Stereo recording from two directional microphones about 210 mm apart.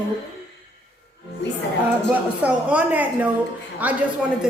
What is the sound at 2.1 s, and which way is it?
Music, 5° right (ahead or behind).